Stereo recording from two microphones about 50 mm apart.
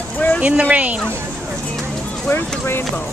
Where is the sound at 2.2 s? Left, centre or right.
Left.